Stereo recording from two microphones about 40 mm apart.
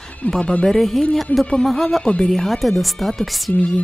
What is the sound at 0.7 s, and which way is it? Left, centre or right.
Speech, centre.